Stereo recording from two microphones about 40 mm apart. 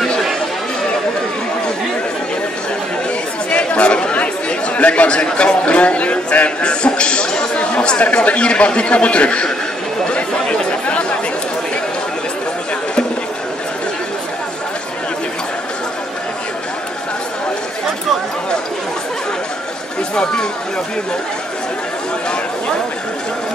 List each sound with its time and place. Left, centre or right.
3.4 s a man's voice: left